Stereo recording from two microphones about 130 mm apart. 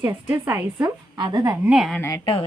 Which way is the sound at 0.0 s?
20° right (ahead or behind).